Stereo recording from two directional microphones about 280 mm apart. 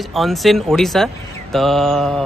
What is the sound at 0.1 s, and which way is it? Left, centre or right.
Speech, centre.